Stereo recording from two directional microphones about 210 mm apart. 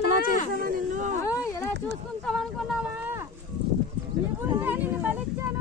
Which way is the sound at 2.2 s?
Centre (ahead or behind).